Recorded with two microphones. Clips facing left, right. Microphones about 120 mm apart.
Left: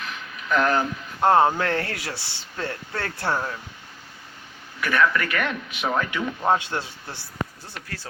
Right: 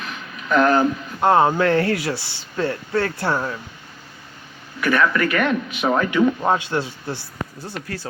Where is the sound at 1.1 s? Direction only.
15° right (ahead or behind).